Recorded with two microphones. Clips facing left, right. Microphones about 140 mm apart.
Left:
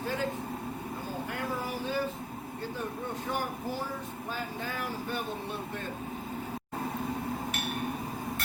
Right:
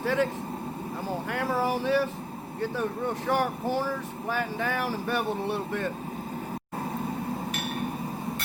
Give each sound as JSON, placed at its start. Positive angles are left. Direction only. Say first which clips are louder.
{"t": 0.0, "sound": "speech", "louder": "right 7 dB", "side_deg": -75}
{"t": 1.3, "sound": "speech", "louder": "right 9 dB", "side_deg": -75}
{"t": 3.2, "sound": "speech", "louder": "right 8 dB", "side_deg": -75}